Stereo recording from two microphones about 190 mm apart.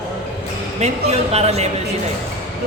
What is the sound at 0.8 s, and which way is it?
Speech, 35° right (ahead or behind).